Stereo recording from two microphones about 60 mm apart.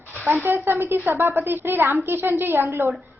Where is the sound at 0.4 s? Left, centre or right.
Right.